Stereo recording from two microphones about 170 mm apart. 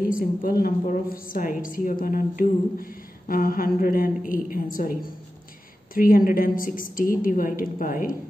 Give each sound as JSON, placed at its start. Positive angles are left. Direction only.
{"t": 0.0, "sound": "a woman's voice", "side_deg": 55}